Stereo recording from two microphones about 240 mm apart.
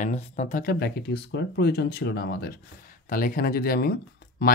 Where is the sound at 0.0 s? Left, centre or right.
Left.